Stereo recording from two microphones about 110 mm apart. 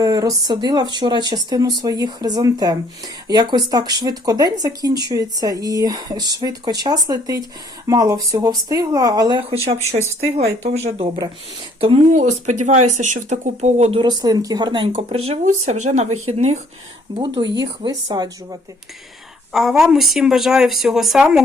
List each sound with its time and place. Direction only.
0.0 s speech: 30° right (ahead or behind)
10.2 s speech: 80° right
11.8 s speech: 65° right (ahead or behind); by 14.0 s 80° right
14.0 s speech: 35° right (ahead or behind)
14.9 s speech: 70° right (ahead or behind)
17.2 s speech: 45° right (ahead or behind)
19.5 s speech: 5° right (ahead or behind)